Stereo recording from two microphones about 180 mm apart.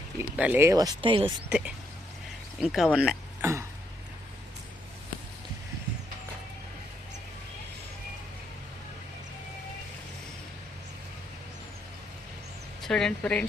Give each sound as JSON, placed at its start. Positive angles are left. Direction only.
{"t": 0.2, "sound": "speech", "side_deg": -10}
{"t": 1.5, "sound": "speech", "side_deg": -5}
{"t": 3.4, "sound": "speech", "side_deg": -15}
{"t": 12.8, "sound": "speech", "side_deg": 5}